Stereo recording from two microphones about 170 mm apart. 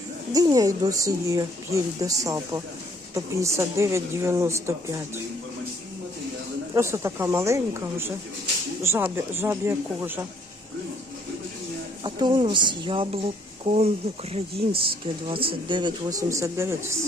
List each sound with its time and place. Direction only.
0.3 s a woman's voice: 20° right (ahead or behind)
6.7 s a woman's voice: 15° right (ahead or behind)
12.0 s speech: 30° right (ahead or behind)